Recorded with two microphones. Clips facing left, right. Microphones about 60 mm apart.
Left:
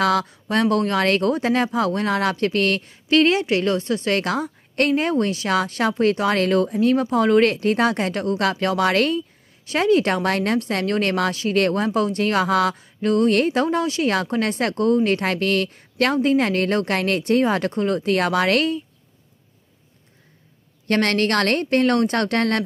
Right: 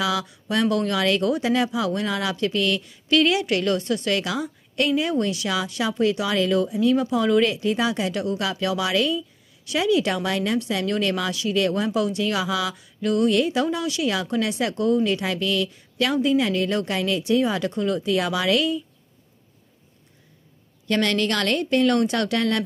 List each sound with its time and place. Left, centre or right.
0.0 s speech: left
4.2 s speech: left
5.5 s speech: left
12.7 s speech: left
20.8 s speech: left